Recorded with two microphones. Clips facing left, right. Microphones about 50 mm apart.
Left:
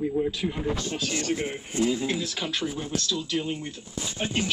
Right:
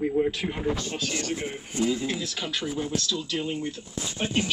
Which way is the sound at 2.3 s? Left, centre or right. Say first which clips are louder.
Left 1 dB; left.